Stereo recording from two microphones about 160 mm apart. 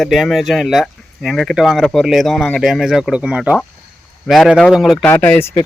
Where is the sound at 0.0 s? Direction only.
Centre (ahead or behind).